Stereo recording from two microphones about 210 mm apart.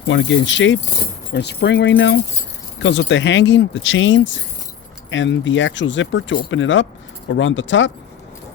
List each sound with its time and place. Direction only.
0.1 s speech: 65° left (ahead or behind)